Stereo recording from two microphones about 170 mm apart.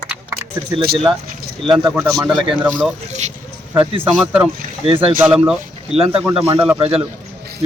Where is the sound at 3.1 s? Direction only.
45° right (ahead or behind).